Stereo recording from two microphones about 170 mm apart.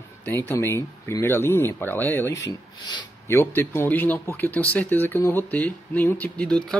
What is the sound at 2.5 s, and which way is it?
Speech, 25° left (ahead or behind).